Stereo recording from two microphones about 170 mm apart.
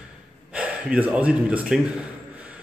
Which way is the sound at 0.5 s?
10° right (ahead or behind).